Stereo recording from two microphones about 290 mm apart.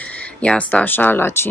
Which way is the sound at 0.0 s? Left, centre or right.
Centre.